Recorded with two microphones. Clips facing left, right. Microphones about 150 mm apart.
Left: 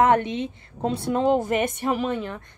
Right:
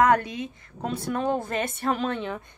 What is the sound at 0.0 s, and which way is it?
A woman's voice, 25° left (ahead or behind).